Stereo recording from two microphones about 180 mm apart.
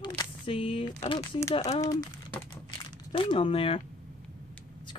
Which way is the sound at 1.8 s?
20° left (ahead or behind).